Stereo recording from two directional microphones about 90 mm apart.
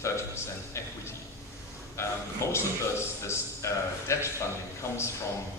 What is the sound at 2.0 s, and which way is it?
A man's voice, 30° left (ahead or behind).